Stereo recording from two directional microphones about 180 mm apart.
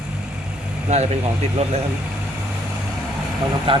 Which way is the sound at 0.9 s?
35° right (ahead or behind).